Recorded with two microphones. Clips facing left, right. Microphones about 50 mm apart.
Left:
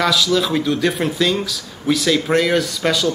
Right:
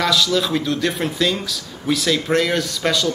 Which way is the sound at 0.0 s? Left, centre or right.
Centre.